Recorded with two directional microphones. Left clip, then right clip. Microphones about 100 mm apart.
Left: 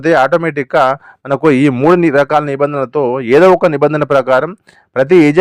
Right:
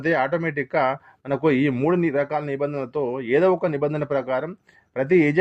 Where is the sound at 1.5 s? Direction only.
50° left (ahead or behind).